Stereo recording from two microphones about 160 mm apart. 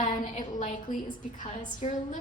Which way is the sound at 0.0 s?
55° left (ahead or behind).